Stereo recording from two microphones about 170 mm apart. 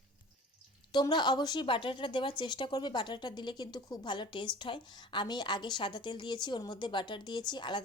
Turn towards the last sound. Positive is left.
turn(degrees=25)  # may be behind; listen again after turning